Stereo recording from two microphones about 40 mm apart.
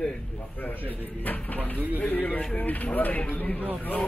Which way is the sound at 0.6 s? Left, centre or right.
Left.